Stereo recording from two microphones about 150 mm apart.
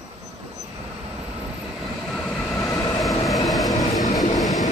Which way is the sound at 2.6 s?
20° left (ahead or behind).